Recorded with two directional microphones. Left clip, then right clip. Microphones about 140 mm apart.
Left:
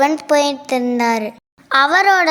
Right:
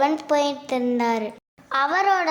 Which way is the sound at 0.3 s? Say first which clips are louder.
Left 6 dB; 25° left (ahead or behind).